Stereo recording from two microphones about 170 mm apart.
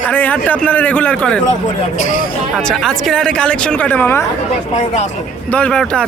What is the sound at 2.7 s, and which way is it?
Speech, centre (ahead or behind).